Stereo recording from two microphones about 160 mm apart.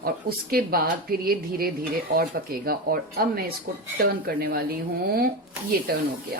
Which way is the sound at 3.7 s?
60° right (ahead or behind).